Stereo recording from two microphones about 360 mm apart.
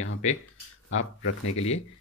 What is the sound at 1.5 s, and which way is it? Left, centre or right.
Speech, centre.